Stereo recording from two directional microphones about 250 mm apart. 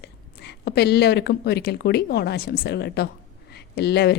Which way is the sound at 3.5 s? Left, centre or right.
Left.